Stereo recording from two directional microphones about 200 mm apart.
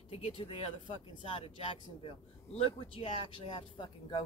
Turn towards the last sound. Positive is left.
turn(degrees=25)  # may be behind; listen again after turning